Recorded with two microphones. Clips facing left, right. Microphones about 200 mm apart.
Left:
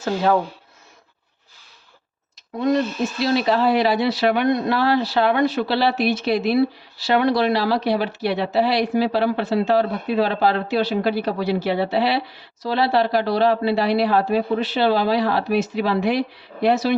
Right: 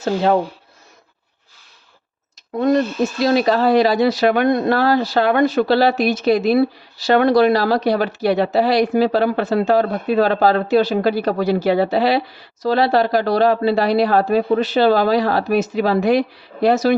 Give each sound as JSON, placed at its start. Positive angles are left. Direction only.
{"t": 0.0, "sound": "speech", "side_deg": -25}
{"t": 2.6, "sound": "speech", "side_deg": -50}